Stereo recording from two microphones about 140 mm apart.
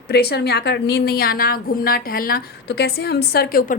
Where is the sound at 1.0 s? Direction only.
90° left.